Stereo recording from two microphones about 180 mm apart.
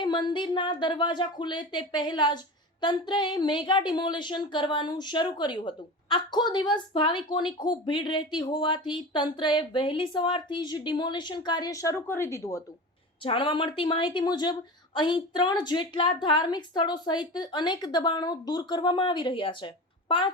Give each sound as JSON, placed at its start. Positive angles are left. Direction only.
{"t": 0.0, "sound": "a woman's voice", "side_deg": 25}
{"t": 13.2, "sound": "a woman's voice", "side_deg": 30}